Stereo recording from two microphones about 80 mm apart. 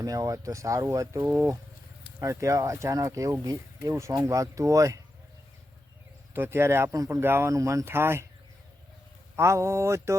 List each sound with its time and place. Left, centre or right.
0.0 s speech: right
2.1 s speech: right
6.3 s speech: right
9.3 s speech: right